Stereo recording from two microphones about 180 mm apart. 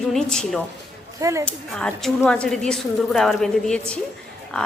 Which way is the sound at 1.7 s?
5° left (ahead or behind).